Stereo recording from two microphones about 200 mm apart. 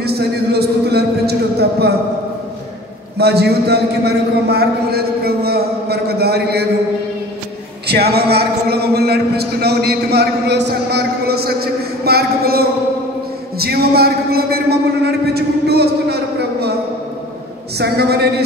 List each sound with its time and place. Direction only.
0.0 s a sound: 55° right (ahead or behind)
3.2 s a man's voice: 55° right (ahead or behind)
7.9 s a man's voice: 55° right (ahead or behind)
17.7 s a woman's voice: 55° right (ahead or behind)